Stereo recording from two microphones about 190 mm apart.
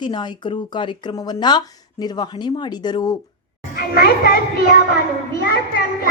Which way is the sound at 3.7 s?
55° left (ahead or behind).